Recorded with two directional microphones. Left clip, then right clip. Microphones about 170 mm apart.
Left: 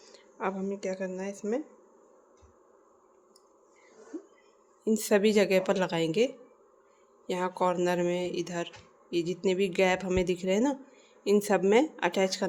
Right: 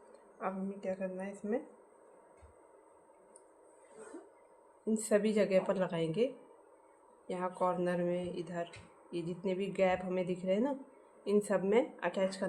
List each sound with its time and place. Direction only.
0.3 s speech: 70° left (ahead or behind)
4.9 s speech: 60° left (ahead or behind)